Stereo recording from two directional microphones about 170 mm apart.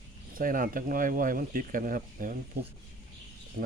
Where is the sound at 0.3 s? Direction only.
55° right (ahead or behind).